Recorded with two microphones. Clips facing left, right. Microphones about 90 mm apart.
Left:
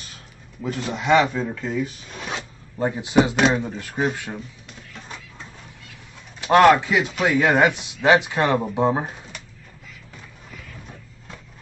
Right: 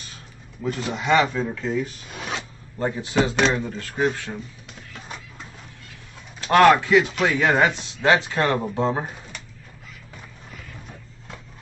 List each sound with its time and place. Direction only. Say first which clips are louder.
0.6 s speech: even; centre (ahead or behind)
2.8 s speech: left 3 dB; 20° left (ahead or behind)
4.6 s a sound: right 1 dB; 5° right (ahead or behind)
6.4 s speech: left 1 dB; 10° left (ahead or behind)